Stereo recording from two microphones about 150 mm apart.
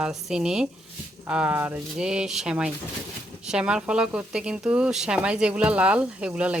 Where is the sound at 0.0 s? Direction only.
5° right (ahead or behind).